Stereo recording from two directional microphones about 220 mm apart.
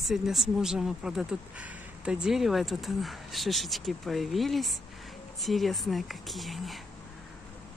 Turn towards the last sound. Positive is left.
turn(degrees=0)  # may be behind; listen again after turning